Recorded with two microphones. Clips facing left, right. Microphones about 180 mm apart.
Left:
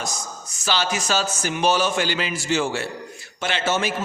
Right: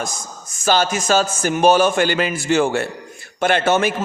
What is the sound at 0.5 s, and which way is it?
A man's voice, 50° right (ahead or behind).